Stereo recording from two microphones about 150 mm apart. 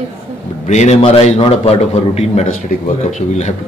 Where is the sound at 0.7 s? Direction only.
50° left (ahead or behind).